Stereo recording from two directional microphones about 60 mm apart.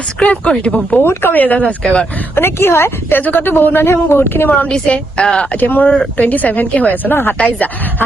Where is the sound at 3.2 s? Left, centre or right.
Left.